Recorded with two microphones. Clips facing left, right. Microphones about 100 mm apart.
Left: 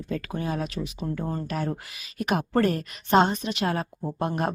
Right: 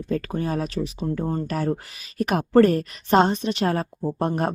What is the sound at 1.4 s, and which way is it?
Speech, 45° right (ahead or behind).